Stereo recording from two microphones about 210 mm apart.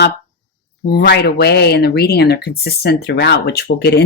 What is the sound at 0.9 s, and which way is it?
Speech, 55° left (ahead or behind).